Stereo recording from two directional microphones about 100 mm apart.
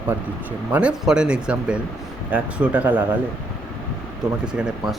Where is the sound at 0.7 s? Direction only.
10° right (ahead or behind).